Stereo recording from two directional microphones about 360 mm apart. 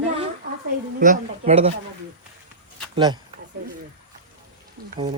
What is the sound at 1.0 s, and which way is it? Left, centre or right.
Speech, centre.